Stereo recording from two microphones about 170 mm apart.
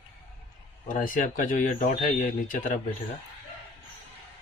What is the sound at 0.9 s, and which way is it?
Speech, 50° left (ahead or behind).